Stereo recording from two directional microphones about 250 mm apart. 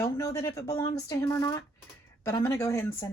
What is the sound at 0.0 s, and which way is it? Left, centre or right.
Speech, centre.